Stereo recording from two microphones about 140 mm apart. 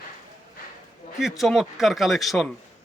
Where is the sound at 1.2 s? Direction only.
Centre (ahead or behind).